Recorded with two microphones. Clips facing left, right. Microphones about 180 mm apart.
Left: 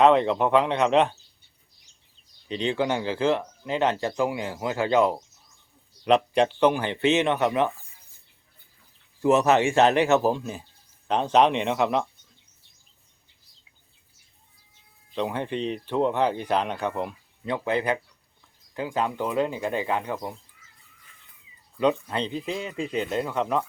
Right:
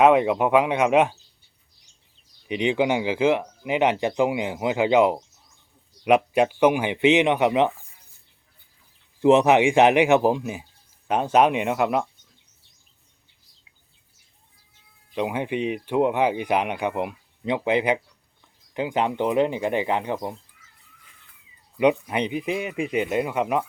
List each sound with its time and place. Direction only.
0.0 s speech: 10° right (ahead or behind)
2.5 s speech: 15° right (ahead or behind)
9.2 s speech: 15° right (ahead or behind)
15.1 s speech: 10° right (ahead or behind)
21.8 s speech: 15° right (ahead or behind)